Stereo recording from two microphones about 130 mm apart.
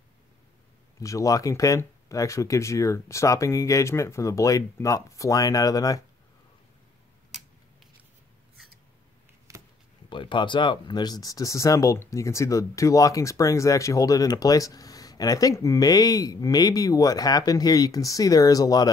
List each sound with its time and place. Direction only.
0.9 s speech: 25° left (ahead or behind)
9.5 s a sound: 25° right (ahead or behind)
10.0 s speech: 40° left (ahead or behind)